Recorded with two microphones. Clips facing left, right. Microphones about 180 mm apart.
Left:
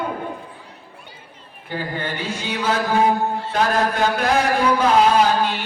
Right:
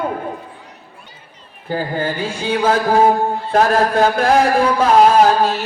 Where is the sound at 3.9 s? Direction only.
40° right (ahead or behind).